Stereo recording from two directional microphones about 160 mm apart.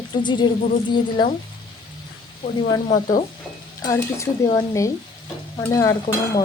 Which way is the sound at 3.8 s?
20° left (ahead or behind).